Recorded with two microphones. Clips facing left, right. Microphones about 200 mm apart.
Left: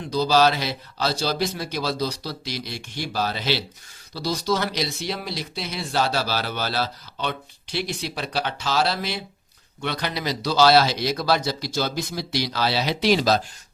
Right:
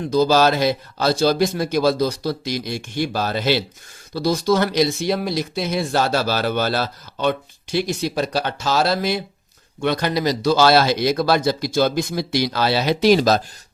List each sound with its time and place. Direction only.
0.1 s speech: 50° right (ahead or behind)